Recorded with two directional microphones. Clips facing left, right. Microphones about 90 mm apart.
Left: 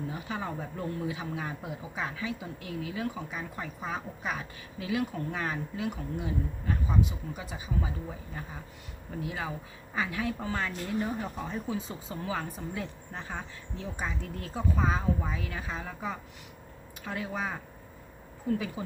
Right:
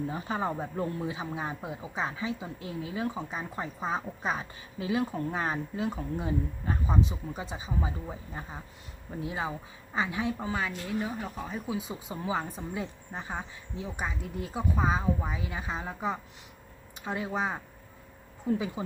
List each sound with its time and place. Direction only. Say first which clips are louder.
0.1 s speech: right 4 dB; 35° right (ahead or behind)
9.2 s speech: right 3 dB; 25° right (ahead or behind)
10.5 s speech: even; 10° right (ahead or behind)